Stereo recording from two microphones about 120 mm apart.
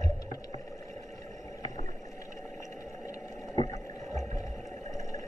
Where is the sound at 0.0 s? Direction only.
30° left (ahead or behind).